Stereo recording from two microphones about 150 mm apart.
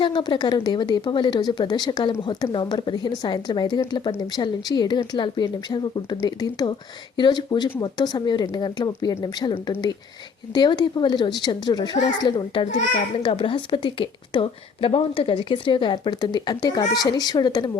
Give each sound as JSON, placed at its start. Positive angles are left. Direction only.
{"t": 0.0, "sound": "a woman's voice", "side_deg": 30}